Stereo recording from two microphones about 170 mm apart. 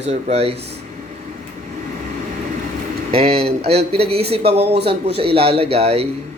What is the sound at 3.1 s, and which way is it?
A man's voice, 35° right (ahead or behind).